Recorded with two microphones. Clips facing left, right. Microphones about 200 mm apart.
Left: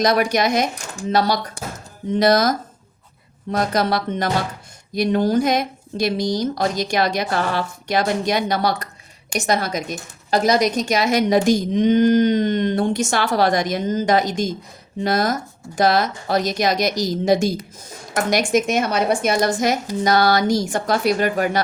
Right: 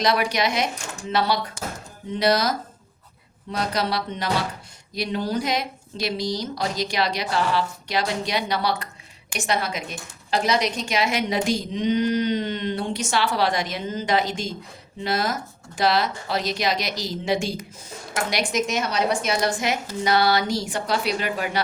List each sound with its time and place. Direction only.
0.0 s a woman's voice: 45° left (ahead or behind)
2.1 s a woman's voice: 45° left (ahead or behind)